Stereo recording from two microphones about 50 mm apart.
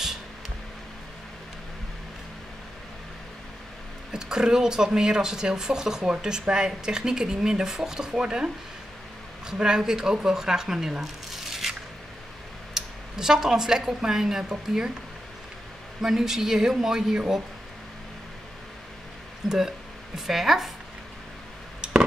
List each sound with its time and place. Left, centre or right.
4.1 s speech: centre
9.5 s speech: centre
12.7 s speech: centre
16.0 s speech: centre
20.2 s speech: centre
21.8 s a sound: centre